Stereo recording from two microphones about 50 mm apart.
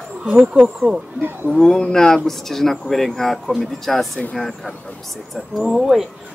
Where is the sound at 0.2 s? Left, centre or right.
Centre.